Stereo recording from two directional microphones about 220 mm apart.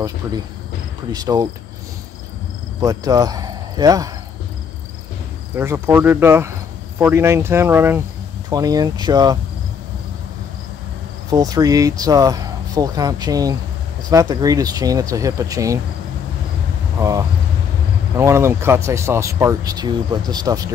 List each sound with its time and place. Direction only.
0.2 s speech: 10° right (ahead or behind)
2.8 s speech: 15° right (ahead or behind)
5.6 s speech: 10° right (ahead or behind)
11.2 s speech: 15° right (ahead or behind)
18.1 s speech: 10° right (ahead or behind)